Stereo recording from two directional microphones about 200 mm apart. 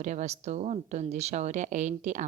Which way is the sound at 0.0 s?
35° right (ahead or behind).